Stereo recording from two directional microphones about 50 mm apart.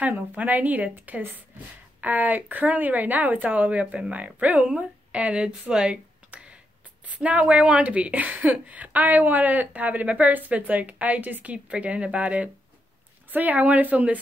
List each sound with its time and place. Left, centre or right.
0.1 s a woman's voice: right